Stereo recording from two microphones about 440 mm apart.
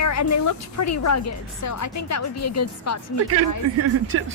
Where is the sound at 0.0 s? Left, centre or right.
Left.